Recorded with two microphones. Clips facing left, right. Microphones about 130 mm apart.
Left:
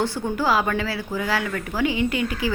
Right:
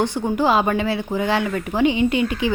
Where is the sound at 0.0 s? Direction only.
20° right (ahead or behind).